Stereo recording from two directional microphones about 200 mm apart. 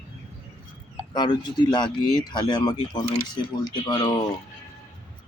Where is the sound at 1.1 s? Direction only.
20° left (ahead or behind).